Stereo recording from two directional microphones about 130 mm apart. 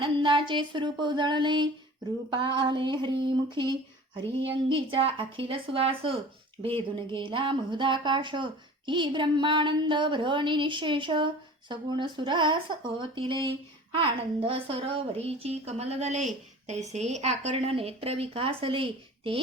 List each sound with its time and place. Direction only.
0.0 s a sound: 40° right (ahead or behind)
2.3 s a woman's voice: 35° right (ahead or behind); by 17.5 s 60° right (ahead or behind)
17.5 s speech: 45° right (ahead or behind)